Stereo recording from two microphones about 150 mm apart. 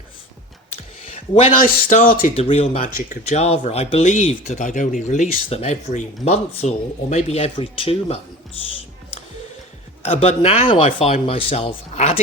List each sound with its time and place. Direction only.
1.6 s speech: 65° left (ahead or behind)
2.3 s speech: 40° left (ahead or behind)
3.0 s speech: 55° left (ahead or behind); by 8.2 s 40° left (ahead or behind)
10.0 s speech: 40° left (ahead or behind)